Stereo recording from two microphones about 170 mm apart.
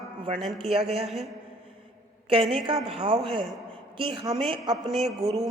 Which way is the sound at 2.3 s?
35° right (ahead or behind).